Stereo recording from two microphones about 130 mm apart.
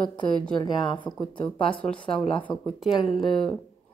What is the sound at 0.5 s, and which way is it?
Speech, 35° left (ahead or behind).